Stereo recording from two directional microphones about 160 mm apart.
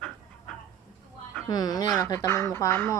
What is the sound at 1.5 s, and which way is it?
Speech, 25° left (ahead or behind).